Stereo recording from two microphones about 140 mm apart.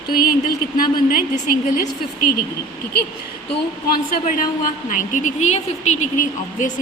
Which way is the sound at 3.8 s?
80° left.